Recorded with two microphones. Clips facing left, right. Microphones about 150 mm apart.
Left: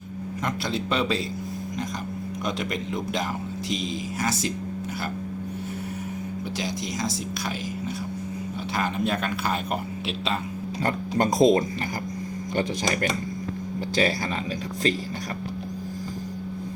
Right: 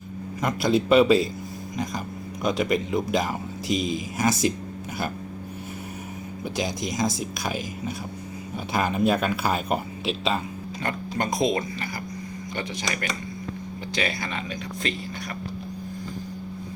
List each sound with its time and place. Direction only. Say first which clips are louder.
0.4 s speech: right 7 dB; 10° right (ahead or behind)
2.4 s speech: right 7 dB; 5° right (ahead or behind)
6.6 s speech: right 5 dB; 15° right (ahead or behind)
10.8 s speech: left 4 dB; 35° left (ahead or behind)